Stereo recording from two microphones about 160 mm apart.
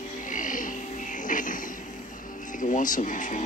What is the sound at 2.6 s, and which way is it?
Speech, 55° left (ahead or behind).